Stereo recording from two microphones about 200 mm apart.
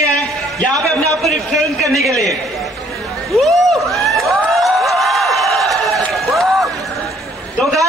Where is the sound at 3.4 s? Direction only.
Centre (ahead or behind).